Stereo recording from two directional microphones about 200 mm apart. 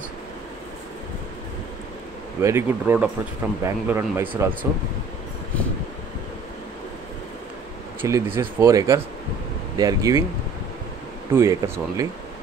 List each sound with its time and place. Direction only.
2.4 s speech: 10° right (ahead or behind)
8.0 s speech: 10° right (ahead or behind)
11.3 s speech: 15° right (ahead or behind)